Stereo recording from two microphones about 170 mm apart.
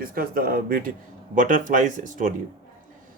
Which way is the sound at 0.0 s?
60° right (ahead or behind).